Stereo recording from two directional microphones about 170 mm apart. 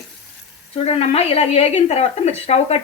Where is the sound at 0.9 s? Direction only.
35° left (ahead or behind).